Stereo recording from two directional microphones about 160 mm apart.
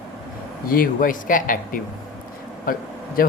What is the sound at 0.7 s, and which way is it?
Speech, 60° left (ahead or behind).